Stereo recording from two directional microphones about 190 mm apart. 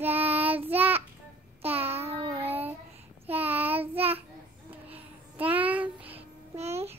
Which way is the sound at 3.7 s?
30° right (ahead or behind).